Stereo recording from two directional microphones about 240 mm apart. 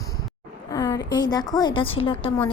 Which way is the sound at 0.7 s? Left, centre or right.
Centre.